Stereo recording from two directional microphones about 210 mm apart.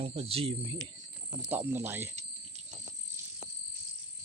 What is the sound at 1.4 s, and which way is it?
Speech, 10° right (ahead or behind).